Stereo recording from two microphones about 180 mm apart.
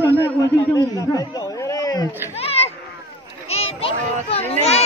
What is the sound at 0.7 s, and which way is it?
A man's voice, 20° left (ahead or behind).